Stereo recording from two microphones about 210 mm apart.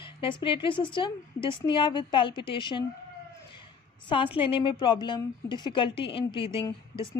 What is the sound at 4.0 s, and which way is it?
A woman's voice, 25° left (ahead or behind).